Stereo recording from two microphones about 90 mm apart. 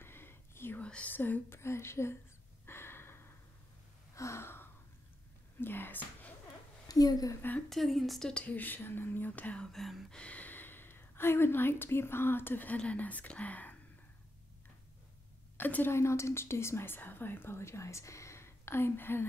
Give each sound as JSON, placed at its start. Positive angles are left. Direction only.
{"t": 0.0, "sound": "whispering", "side_deg": 25}
{"t": 0.8, "sound": "speech", "side_deg": 15}
{"t": 2.6, "sound": "gasp", "side_deg": 25}
{"t": 5.6, "sound": "speech", "side_deg": 25}
{"t": 6.9, "sound": "a woman's voice", "side_deg": 45}
{"t": 7.7, "sound": "speech", "side_deg": 0}
{"t": 9.7, "sound": "speech", "side_deg": 0}
{"t": 15.5, "sound": "speech", "side_deg": 20}